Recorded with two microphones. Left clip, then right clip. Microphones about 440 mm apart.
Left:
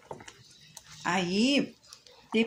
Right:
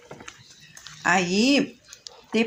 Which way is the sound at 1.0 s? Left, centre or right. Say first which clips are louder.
Right 7 dB; left.